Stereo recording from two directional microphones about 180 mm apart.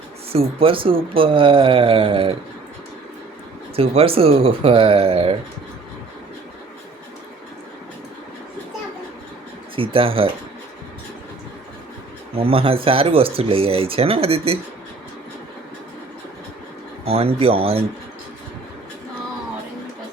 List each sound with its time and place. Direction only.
0.3 s speech: 30° right (ahead or behind)
3.8 s speech: 30° right (ahead or behind)
9.7 s speech: 30° right (ahead or behind)
12.4 s speech: 30° right (ahead or behind)
17.1 s speech: 30° right (ahead or behind)